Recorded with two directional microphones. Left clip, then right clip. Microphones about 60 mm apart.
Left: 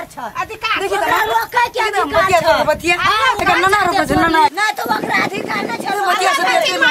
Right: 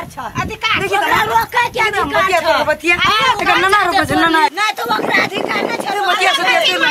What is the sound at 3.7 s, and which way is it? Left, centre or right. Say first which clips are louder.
Speech: right 1 dB; centre.